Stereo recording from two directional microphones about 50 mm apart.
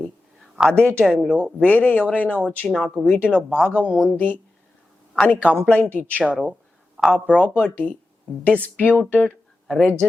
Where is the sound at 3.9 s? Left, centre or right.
Left.